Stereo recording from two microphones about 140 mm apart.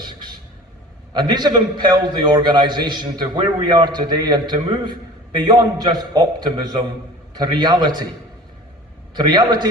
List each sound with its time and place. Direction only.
0.0 s vehicle: 30° right (ahead or behind)
1.1 s a man's voice: 30° right (ahead or behind)
9.1 s a man's voice: 30° right (ahead or behind)